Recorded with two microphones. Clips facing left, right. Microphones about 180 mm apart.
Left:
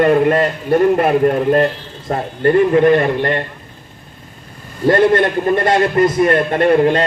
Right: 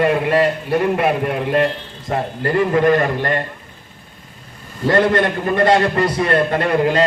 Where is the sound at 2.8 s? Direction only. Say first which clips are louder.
Left 3 dB; 40° right (ahead or behind).